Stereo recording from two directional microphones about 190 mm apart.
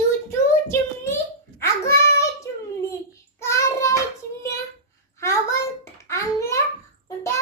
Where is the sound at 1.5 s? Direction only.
15° left (ahead or behind).